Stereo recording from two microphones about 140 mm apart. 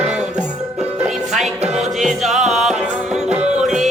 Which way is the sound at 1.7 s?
5° right (ahead or behind).